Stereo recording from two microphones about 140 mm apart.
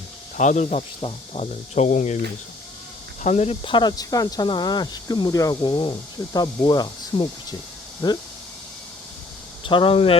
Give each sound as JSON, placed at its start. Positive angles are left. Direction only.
{"t": 0.3, "sound": "speech", "side_deg": 60}
{"t": 3.2, "sound": "speech", "side_deg": 50}
{"t": 9.6, "sound": "speech", "side_deg": 35}